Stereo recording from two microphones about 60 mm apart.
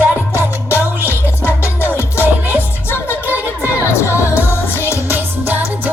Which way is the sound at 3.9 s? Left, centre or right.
Left.